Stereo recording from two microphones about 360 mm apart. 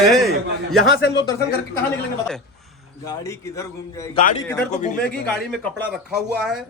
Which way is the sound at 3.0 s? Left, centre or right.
Centre.